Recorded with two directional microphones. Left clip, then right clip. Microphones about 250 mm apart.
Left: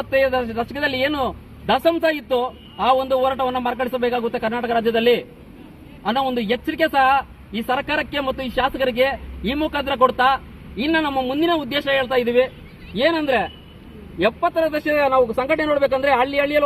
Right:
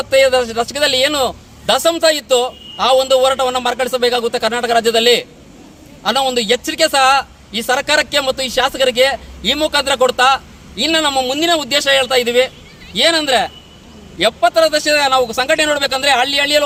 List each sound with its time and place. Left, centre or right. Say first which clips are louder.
0.2 s a man's voice: right 7 dB; right